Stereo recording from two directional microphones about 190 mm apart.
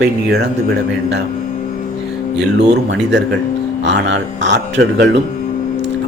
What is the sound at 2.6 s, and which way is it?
A man's voice, 65° right (ahead or behind).